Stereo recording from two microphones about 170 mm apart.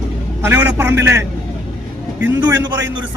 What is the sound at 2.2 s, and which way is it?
Music, 25° right (ahead or behind).